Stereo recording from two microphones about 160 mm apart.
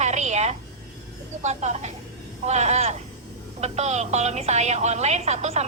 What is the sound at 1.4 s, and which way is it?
A woman's voice, 45° right (ahead or behind).